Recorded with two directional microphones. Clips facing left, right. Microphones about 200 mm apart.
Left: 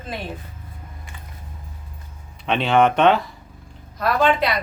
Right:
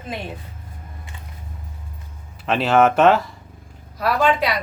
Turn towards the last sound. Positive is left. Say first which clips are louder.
# even
turn(degrees=-10)  # may be behind; listen again after turning